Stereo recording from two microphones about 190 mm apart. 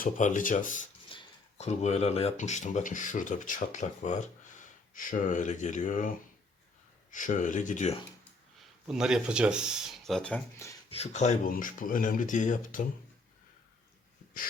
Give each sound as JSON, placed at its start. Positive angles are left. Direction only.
{"t": 0.0, "sound": "speech", "side_deg": 40}
{"t": 8.9, "sound": "speech", "side_deg": -5}
{"t": 10.8, "sound": "speech", "side_deg": 30}